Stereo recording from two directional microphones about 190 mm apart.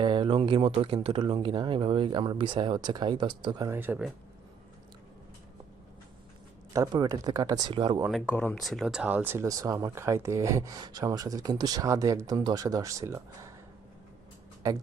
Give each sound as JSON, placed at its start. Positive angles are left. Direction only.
{"t": 0.0, "sound": "speech", "side_deg": -25}
{"t": 3.7, "sound": "speech", "side_deg": -10}
{"t": 6.7, "sound": "speech", "side_deg": -20}
{"t": 8.1, "sound": "speech", "side_deg": 10}
{"t": 14.6, "sound": "speech", "side_deg": -15}